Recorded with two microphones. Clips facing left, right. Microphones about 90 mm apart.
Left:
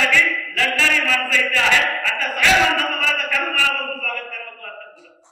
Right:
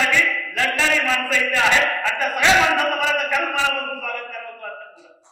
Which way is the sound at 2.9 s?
15° right (ahead or behind).